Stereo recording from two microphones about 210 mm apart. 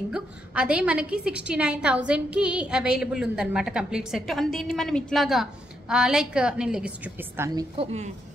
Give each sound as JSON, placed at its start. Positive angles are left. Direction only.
{"t": 0.1, "sound": "a woman's voice", "side_deg": -5}
{"t": 7.7, "sound": "a woman's voice", "side_deg": -30}